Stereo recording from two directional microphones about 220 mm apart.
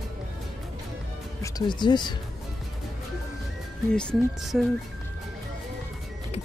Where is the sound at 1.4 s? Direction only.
20° left (ahead or behind).